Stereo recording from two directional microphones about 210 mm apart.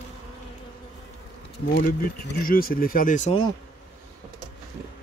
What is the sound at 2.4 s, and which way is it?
Speech, 45° left (ahead or behind).